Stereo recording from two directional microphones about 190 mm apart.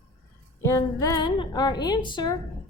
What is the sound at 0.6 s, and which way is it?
A woman's voice, 15° left (ahead or behind).